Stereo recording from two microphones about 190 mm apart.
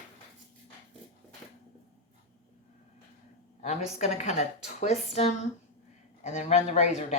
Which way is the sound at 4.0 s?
35° left (ahead or behind).